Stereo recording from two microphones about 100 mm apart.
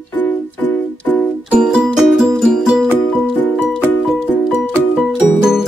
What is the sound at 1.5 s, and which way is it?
Music, 10° right (ahead or behind).